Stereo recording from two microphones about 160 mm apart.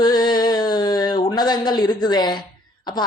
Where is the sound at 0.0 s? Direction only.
25° left (ahead or behind).